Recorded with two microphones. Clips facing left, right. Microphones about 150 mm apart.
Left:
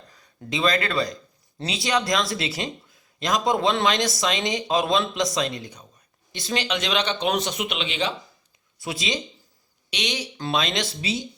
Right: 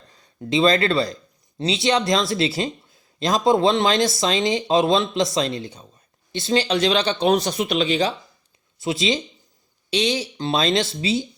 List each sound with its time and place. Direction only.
0.1 s speech: 30° right (ahead or behind)
8.8 s speech: 25° right (ahead or behind)